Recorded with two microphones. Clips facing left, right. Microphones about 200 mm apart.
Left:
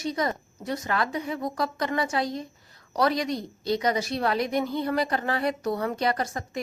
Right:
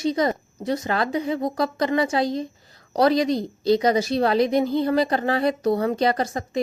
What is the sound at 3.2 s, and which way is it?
Speech, 90° right.